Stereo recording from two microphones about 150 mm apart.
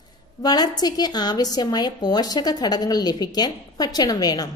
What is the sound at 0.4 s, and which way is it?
A woman's voice, 25° left (ahead or behind).